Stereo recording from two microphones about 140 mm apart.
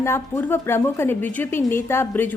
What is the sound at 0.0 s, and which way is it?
A woman's voice, 15° left (ahead or behind).